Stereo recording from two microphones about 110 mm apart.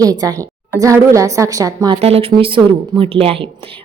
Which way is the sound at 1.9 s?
65° right (ahead or behind).